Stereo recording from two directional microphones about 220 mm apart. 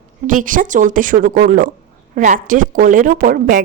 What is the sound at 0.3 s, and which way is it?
Speech, 35° right (ahead or behind).